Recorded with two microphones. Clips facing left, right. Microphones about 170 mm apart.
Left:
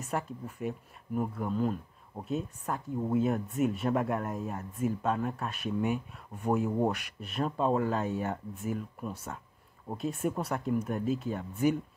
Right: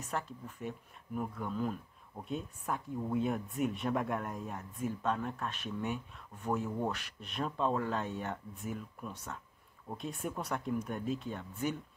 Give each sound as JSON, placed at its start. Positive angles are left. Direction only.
{"t": 0.0, "sound": "speech", "side_deg": 10}
{"t": 1.5, "sound": "speech", "side_deg": 35}
{"t": 2.2, "sound": "speech", "side_deg": 0}
{"t": 9.0, "sound": "speech", "side_deg": 30}
{"t": 9.9, "sound": "speech", "side_deg": 5}